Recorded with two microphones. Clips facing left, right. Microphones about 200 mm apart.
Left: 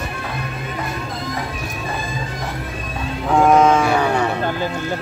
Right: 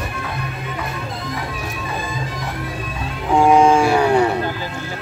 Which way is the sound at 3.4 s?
10° right (ahead or behind).